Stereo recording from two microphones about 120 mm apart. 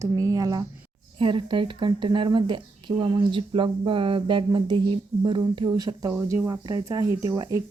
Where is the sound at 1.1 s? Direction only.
45° right (ahead or behind).